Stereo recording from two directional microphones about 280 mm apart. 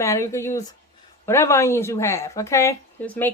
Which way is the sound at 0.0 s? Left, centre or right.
Centre.